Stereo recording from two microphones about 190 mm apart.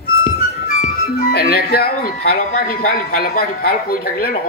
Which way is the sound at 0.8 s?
50° left (ahead or behind).